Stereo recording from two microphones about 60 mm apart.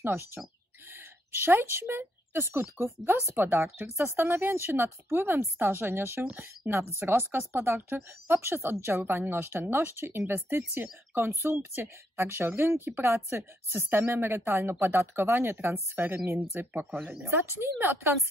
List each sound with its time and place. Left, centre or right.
0.0 s speech: right
3.7 s speech: right
4.0 s a woman's voice: right